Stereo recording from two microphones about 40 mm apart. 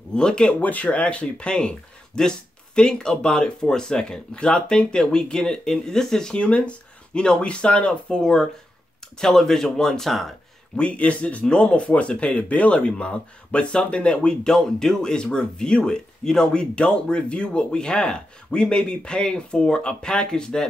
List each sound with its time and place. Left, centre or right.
0.1 s speech: left
0.6 s speech: left; by 6.3 s centre
6.3 s speech: left
8.1 s speech: centre
10.8 s speech: left
14.5 s speech: centre